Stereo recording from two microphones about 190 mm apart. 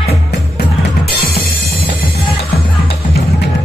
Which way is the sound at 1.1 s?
55° left (ahead or behind).